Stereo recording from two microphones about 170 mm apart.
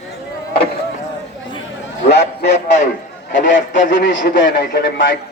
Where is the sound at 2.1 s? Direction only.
85° left.